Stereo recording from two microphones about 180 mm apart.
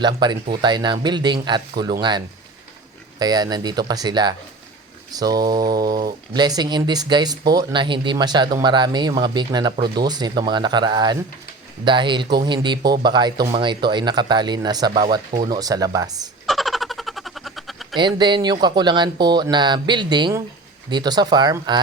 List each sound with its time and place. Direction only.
0.0 s speech: 25° right (ahead or behind)
16.5 s a sound: centre (ahead or behind)
17.9 s speech: 25° right (ahead or behind)